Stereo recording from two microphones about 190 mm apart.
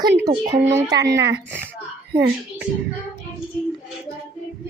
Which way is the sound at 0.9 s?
20° right (ahead or behind).